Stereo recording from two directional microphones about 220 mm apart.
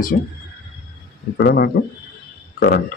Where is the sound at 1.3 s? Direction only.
45° left (ahead or behind).